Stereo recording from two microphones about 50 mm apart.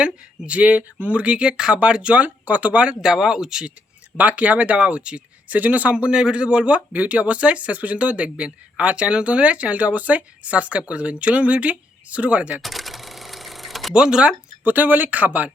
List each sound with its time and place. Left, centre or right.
0.0 s speech: right
2.2 s speech: right
2.8 s speech: centre
4.2 s speech: right
5.5 s speech: right
12.6 s typewriter: centre
13.9 s speech: centre
14.6 s speech: right